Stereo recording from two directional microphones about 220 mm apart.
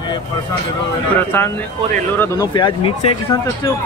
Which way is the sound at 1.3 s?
10° left (ahead or behind).